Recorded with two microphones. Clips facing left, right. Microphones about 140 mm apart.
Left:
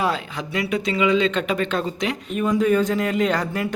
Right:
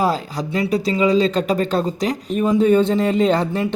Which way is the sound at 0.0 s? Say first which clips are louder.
Right 4 dB; 35° right (ahead or behind).